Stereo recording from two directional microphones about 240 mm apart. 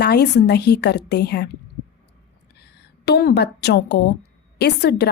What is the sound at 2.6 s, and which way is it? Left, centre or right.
A woman's voice, left.